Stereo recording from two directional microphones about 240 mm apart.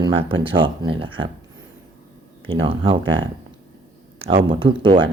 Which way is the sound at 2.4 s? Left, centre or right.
Right.